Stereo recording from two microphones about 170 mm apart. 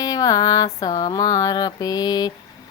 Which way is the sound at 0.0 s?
20° left (ahead or behind).